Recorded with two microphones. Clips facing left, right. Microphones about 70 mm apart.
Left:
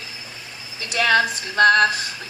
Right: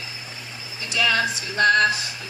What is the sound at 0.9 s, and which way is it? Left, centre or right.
Speech, left.